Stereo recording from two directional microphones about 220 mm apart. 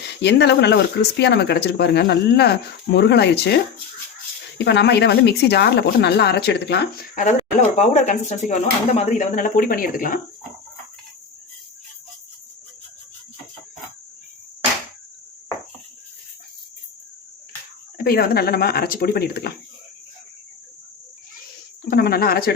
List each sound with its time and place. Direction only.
0.2 s speech: 50° left (ahead or behind)
7.3 s speech: 30° left (ahead or behind)
17.9 s speech: 45° left (ahead or behind)
21.8 s speech: 45° left (ahead or behind)